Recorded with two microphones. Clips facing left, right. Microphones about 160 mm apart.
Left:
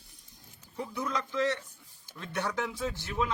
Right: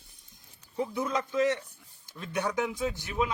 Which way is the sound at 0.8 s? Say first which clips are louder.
Right 4 dB; 25° right (ahead or behind).